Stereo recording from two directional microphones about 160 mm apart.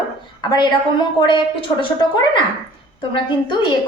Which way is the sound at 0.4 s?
25° left (ahead or behind).